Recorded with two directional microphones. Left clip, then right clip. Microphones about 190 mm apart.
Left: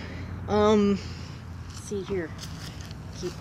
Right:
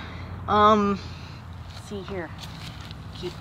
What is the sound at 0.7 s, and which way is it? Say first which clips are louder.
Speech: right 3 dB; 15° right (ahead or behind).